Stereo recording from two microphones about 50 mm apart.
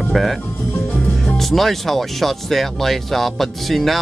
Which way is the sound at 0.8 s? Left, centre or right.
Left.